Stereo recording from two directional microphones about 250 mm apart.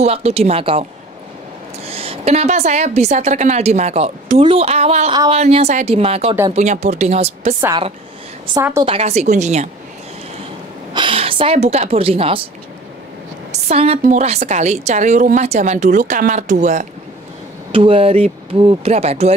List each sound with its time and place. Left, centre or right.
0.0 s a woman's voice: right
1.9 s a woman's voice: right
8.8 s a woman's voice: right
10.9 s a woman's voice: centre
13.5 s a woman's voice: right